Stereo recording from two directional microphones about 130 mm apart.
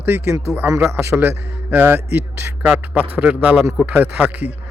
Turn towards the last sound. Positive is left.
turn(degrees=-10)  # may be behind; listen again after turning